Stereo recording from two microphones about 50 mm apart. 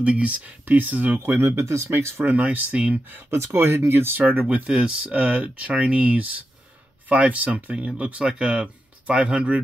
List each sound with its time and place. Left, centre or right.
0.0 s speech: right
1.2 s speech: right
2.2 s speech: right
3.3 s speech: right
4.2 s speech: right